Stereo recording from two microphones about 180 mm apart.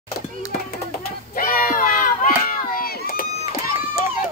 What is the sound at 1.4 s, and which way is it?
Crowd, 50° left (ahead or behind).